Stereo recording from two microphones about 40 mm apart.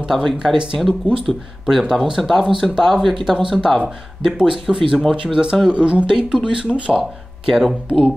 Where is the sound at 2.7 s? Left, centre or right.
Centre.